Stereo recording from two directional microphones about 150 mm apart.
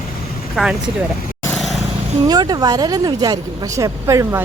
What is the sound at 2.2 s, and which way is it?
Speech, 25° right (ahead or behind).